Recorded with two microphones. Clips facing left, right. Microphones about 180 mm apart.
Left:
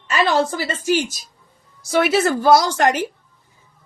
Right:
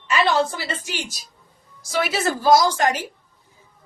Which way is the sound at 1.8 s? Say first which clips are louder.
Left 6 dB; 60° left (ahead or behind).